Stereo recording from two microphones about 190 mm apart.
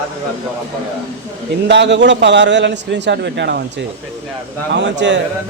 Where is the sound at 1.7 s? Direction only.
65° right (ahead or behind).